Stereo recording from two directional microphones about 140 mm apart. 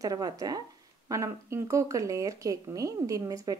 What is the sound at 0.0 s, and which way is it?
Speech, 25° right (ahead or behind).